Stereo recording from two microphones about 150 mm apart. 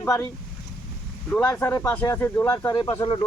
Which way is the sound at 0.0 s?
20° left (ahead or behind).